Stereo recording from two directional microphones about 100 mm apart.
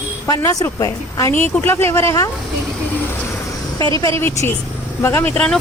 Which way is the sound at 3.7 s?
35° left (ahead or behind).